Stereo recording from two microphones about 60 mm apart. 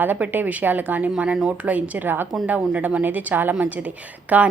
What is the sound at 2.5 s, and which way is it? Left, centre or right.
A woman's voice, right.